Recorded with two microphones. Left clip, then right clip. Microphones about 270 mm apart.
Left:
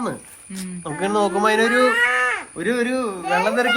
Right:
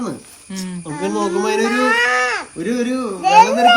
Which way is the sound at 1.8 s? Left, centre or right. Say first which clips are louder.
Right 2 dB; centre.